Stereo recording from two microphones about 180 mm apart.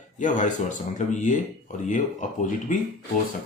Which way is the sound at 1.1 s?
45° left (ahead or behind).